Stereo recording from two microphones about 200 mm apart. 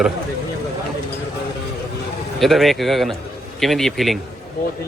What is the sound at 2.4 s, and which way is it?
Speech, centre (ahead or behind).